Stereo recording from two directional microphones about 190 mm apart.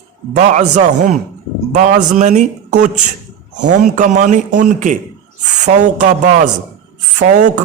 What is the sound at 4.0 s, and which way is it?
A man's voice, 40° right (ahead or behind).